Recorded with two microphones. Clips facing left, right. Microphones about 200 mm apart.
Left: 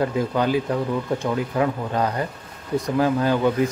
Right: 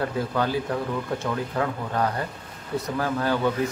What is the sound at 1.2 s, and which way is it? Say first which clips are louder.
A man's voice: left 5 dB; 15° left (ahead or behind).